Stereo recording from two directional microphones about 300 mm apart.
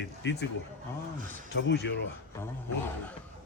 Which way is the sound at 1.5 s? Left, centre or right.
Left.